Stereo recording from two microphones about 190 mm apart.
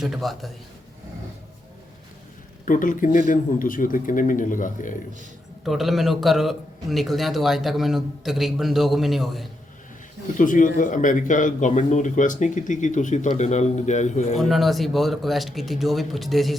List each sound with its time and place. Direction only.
0.0 s a man's voice: centre (ahead or behind)
2.6 s speech: 45° left (ahead or behind)
5.6 s a man's voice: centre (ahead or behind)
10.3 s speech: 45° left (ahead or behind)
14.3 s a man's voice: centre (ahead or behind)